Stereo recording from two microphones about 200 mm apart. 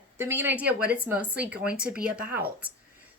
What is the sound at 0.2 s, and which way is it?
A woman's voice, 10° right (ahead or behind).